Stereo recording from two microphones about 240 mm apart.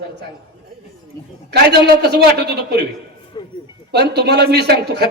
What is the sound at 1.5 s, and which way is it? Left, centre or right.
A man's voice, right.